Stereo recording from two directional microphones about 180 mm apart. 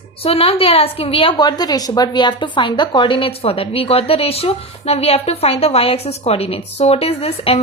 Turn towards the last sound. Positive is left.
turn(degrees=35)  # may be behind; listen again after turning